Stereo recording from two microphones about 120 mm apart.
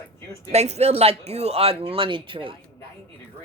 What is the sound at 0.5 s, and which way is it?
Speech, 65° right (ahead or behind).